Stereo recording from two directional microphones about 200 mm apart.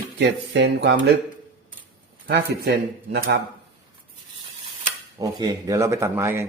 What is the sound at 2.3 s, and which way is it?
Speech, 55° right (ahead or behind).